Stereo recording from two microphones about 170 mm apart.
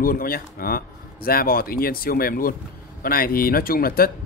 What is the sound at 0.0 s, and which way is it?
Speech, 60° left (ahead or behind).